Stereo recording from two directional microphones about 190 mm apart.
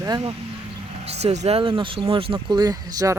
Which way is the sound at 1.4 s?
30° right (ahead or behind).